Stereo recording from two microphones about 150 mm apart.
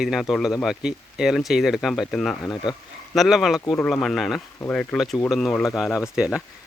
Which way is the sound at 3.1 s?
Centre (ahead or behind).